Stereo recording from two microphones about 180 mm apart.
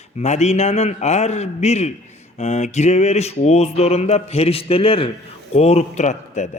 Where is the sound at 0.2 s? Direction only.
40° left (ahead or behind).